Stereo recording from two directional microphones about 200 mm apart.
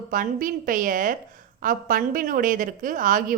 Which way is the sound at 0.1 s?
45° right (ahead or behind).